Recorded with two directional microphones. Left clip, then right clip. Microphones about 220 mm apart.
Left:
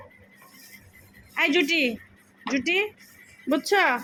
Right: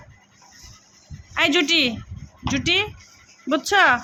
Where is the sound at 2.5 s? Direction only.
20° right (ahead or behind).